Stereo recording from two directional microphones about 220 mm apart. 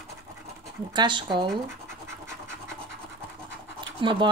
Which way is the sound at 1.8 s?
10° right (ahead or behind).